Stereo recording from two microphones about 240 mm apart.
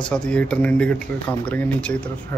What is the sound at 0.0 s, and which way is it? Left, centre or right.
Speech, centre.